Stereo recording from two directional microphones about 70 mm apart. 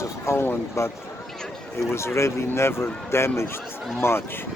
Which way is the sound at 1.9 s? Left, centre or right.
Left.